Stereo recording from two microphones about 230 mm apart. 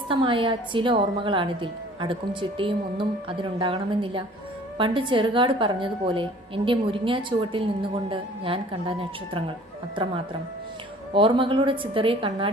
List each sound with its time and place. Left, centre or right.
0.1 s a woman's voice: right
11.1 s a woman's voice: right